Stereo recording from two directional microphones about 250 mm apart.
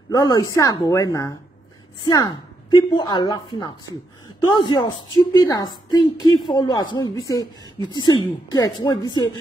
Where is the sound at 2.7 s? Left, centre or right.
Centre.